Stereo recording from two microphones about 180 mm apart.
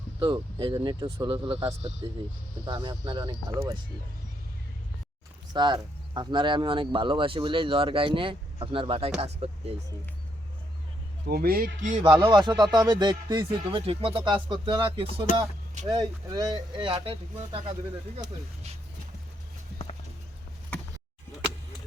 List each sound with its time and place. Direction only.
0.2 s speech: 25° right (ahead or behind)
5.5 s speech: 25° right (ahead or behind)
11.3 s speech: 55° right (ahead or behind)
11.9 s speech: 25° right (ahead or behind)
15.3 s speech: 45° left (ahead or behind)
15.9 s speech: 20° right (ahead or behind)